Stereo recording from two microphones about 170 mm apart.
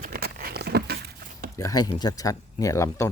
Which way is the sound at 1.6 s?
20° left (ahead or behind).